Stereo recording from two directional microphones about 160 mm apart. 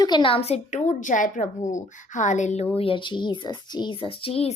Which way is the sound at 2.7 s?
35° left (ahead or behind).